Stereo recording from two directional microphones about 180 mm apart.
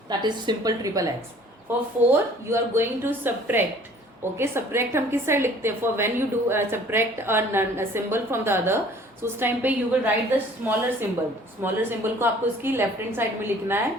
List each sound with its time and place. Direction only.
0.1 s a woman's voice: 25° right (ahead or behind)
2.0 s a woman's voice: 10° right (ahead or behind)